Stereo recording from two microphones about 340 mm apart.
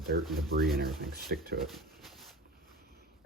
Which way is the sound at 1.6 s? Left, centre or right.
Centre.